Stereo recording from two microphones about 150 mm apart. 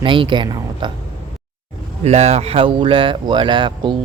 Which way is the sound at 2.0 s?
45° right (ahead or behind).